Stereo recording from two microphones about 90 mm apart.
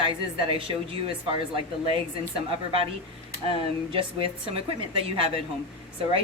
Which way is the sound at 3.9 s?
85° right.